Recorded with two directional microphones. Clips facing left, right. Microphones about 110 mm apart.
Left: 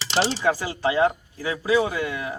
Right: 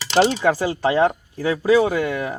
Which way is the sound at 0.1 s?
50° right (ahead or behind).